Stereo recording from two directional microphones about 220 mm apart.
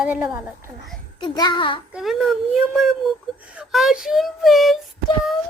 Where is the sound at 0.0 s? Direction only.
5° right (ahead or behind).